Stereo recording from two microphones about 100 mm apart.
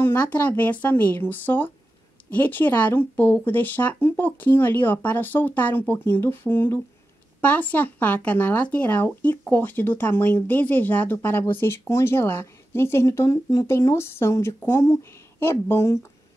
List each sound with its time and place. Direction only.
0.0 s speech: 15° left (ahead or behind)